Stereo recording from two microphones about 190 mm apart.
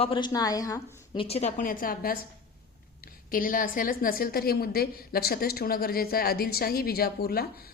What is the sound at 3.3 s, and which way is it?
A woman's voice, 45° left (ahead or behind).